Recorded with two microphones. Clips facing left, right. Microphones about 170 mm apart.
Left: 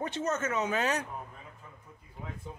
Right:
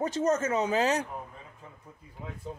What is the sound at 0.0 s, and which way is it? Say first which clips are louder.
Speech: right 5 dB; 40° right (ahead or behind).